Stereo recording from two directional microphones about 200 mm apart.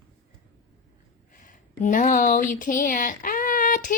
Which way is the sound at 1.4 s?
40° left (ahead or behind).